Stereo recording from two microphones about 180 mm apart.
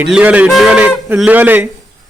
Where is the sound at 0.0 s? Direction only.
10° right (ahead or behind).